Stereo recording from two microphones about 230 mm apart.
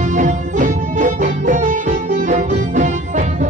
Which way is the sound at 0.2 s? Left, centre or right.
Right.